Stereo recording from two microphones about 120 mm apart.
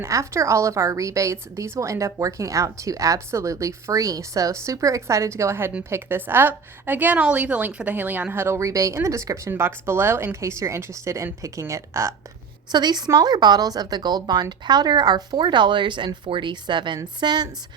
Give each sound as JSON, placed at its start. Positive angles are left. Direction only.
{"t": 0.0, "sound": "a woman's voice", "side_deg": -25}
{"t": 12.7, "sound": "speech", "side_deg": -35}